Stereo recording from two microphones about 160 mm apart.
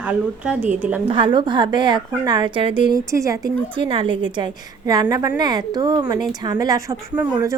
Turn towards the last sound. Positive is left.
turn(degrees=-20)  # may be behind; listen again after turning